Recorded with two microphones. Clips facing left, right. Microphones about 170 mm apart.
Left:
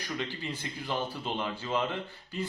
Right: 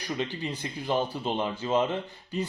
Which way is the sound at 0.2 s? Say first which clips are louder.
Right 4 dB; 20° right (ahead or behind).